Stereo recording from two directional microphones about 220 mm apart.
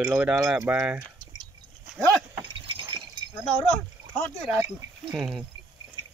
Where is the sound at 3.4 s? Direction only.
5° left (ahead or behind).